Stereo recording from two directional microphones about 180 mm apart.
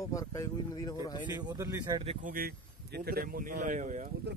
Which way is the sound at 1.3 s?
20° right (ahead or behind).